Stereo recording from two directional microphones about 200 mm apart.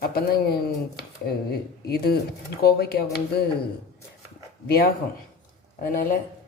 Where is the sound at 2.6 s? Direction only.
50° left (ahead or behind).